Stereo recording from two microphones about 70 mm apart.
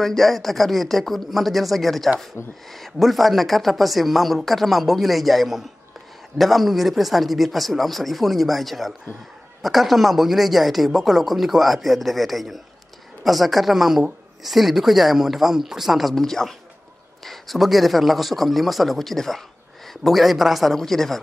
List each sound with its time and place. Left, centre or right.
0.0 s speech: centre
2.4 s speech: left
2.7 s speech: centre